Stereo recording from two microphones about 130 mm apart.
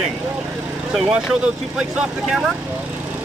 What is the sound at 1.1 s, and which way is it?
Speech, 5° right (ahead or behind).